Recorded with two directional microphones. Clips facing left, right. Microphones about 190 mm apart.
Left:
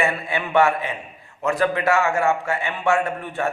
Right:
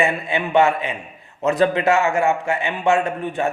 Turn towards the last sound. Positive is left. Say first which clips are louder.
# right 3 dB
turn(degrees=-20)  # may be behind; listen again after turning